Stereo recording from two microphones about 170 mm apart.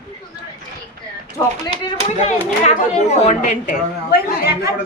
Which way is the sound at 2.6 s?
40° left (ahead or behind).